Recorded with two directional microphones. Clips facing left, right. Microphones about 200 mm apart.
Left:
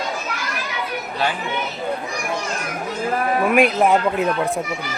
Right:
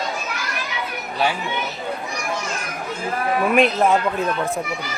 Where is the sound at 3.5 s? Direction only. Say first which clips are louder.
Left 1 dB; 10° left (ahead or behind).